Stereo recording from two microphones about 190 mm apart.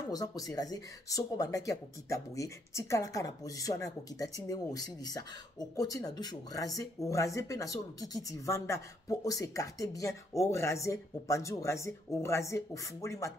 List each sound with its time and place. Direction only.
0.1 s speech: 20° left (ahead or behind)